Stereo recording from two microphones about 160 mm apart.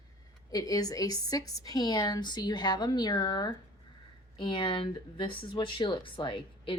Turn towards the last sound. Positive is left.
turn(degrees=30)  # may be behind; listen again after turning